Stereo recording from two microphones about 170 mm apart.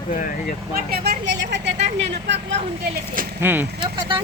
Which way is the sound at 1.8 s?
40° right (ahead or behind).